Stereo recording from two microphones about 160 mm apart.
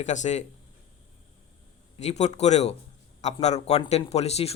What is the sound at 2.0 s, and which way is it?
A man's voice, 45° left (ahead or behind).